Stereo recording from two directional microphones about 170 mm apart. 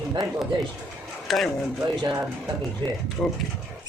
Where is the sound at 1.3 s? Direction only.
Centre (ahead or behind).